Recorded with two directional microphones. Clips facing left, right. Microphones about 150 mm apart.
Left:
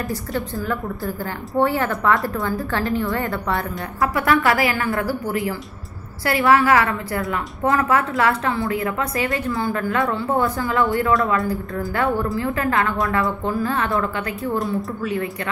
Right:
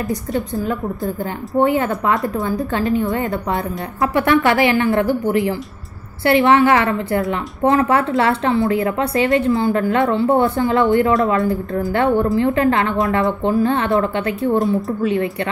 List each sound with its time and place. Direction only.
0.1 s a woman's voice: 20° right (ahead or behind)